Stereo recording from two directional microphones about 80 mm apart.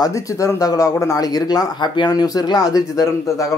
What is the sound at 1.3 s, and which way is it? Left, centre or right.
Speech, left.